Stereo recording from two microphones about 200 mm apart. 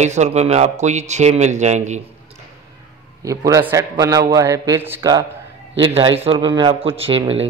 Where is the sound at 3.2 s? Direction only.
15° right (ahead or behind).